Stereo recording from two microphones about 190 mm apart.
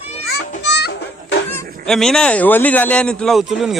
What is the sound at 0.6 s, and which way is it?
Music, 65° left (ahead or behind).